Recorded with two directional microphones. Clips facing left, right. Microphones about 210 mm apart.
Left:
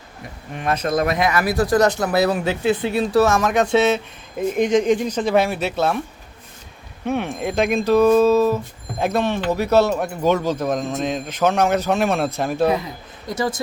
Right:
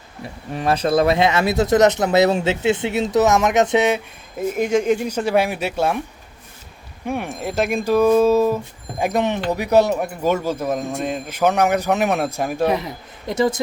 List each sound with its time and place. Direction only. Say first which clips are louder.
0.5 s speech: right 3 dB; 30° right (ahead or behind); by 6.0 s 10° right (ahead or behind)
7.1 s speech: left 2 dB; 10° right (ahead or behind)
13.2 s speech: right 4 dB; 20° right (ahead or behind)